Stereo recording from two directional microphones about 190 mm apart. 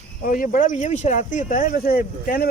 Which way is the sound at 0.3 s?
45° left (ahead or behind).